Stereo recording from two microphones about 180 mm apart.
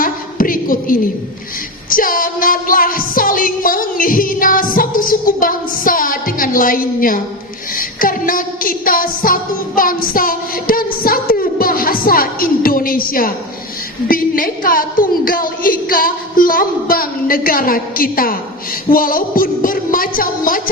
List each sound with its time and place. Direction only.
0.0 s a sound: 50° left (ahead or behind)
1.9 s music: 50° left (ahead or behind)
14.1 s a woman's voice: 50° left (ahead or behind)